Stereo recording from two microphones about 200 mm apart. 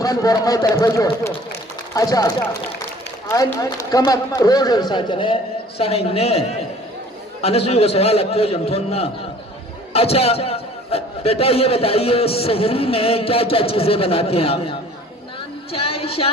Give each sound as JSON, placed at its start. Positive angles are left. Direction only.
{"t": 0.0, "sound": "a man's voice", "side_deg": 15}
{"t": 7.4, "sound": "a man's voice", "side_deg": 30}
{"t": 15.7, "sound": "a sound", "side_deg": 30}